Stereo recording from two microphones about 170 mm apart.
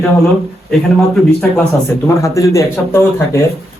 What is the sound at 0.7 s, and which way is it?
Speech, 5° left (ahead or behind).